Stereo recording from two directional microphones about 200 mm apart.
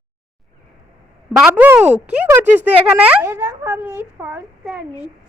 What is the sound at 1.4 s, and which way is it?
Speech, 5° right (ahead or behind).